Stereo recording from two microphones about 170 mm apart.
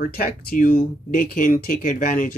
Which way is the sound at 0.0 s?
60° left (ahead or behind).